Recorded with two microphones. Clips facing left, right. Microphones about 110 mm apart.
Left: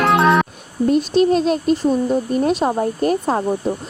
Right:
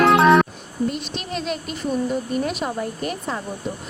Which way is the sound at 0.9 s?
40° left (ahead or behind).